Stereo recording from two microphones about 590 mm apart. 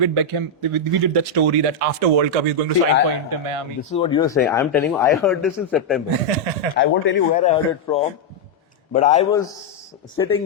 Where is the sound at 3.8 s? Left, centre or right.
Centre.